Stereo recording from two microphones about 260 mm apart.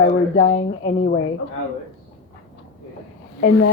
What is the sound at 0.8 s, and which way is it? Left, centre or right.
Speech, left.